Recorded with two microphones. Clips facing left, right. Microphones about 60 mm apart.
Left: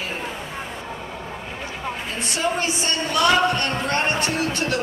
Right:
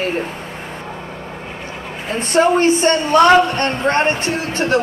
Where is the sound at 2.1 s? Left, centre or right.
Right.